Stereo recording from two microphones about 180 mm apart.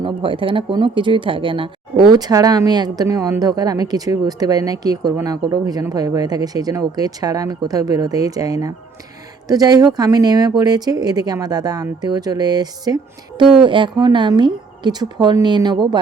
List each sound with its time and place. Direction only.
0.0 s speech: 30° right (ahead or behind)